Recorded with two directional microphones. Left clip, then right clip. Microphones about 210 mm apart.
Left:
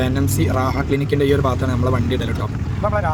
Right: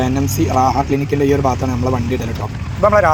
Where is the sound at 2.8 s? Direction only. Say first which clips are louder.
Right 10 dB; 25° right (ahead or behind).